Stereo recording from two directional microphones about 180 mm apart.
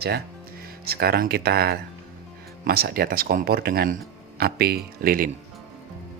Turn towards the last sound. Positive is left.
turn(degrees=-55)  # may be behind; listen again after turning